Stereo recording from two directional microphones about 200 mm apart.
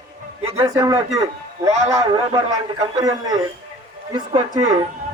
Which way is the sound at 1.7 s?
35° right (ahead or behind).